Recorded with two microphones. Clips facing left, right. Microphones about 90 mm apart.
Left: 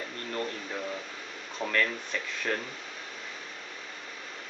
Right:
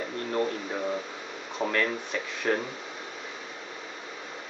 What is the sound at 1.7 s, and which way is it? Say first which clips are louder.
Speech: even; 10° right (ahead or behind).